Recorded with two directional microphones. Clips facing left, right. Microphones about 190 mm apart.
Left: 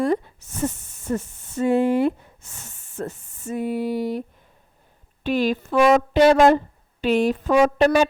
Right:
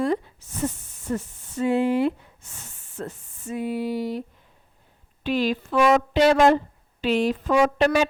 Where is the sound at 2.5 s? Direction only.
45° left (ahead or behind).